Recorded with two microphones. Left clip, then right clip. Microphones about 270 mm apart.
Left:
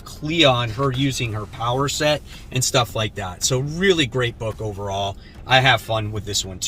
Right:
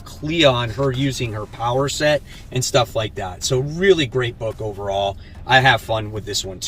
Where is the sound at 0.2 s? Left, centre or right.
Centre.